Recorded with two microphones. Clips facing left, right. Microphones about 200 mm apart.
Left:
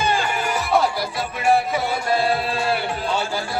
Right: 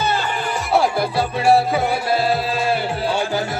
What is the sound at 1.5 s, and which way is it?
Music, 35° right (ahead or behind).